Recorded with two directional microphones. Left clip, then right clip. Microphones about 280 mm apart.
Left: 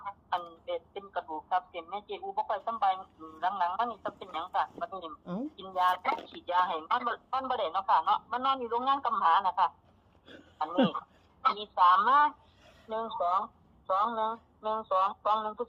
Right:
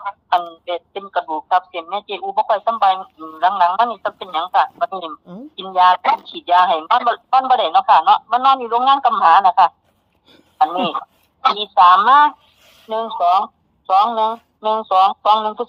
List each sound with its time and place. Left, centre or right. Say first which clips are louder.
0.0 s speech: right 16 dB; right
5.2 s speech: right 2 dB; centre
5.5 s a man's voice: right 16 dB; right